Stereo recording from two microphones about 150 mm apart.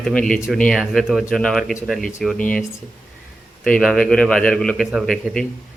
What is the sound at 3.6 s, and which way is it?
A man's voice, 5° left (ahead or behind).